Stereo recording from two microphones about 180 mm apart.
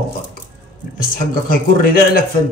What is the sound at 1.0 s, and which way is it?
Speech, 55° left (ahead or behind).